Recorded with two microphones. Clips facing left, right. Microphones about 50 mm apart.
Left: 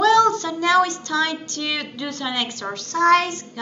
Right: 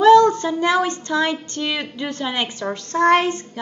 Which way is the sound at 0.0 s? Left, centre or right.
Right.